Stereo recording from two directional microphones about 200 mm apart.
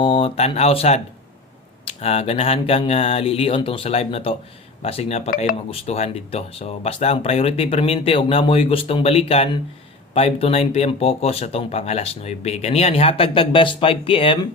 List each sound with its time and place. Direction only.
0.0 s speech: 25° left (ahead or behind)